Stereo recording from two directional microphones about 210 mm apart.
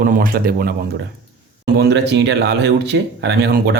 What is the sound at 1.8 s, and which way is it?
Speech, 55° right (ahead or behind).